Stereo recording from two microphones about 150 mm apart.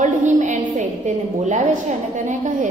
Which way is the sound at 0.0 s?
55° right (ahead or behind).